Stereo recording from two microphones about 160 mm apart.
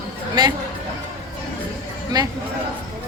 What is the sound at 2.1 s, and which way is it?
Speech, 25° right (ahead or behind).